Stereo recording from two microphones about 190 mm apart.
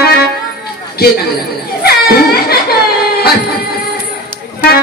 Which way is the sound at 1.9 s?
55° left (ahead or behind).